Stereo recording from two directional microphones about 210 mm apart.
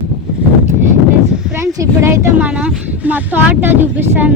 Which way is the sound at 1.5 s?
15° right (ahead or behind).